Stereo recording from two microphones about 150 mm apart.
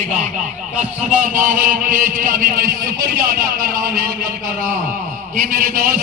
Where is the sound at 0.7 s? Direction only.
55° right (ahead or behind).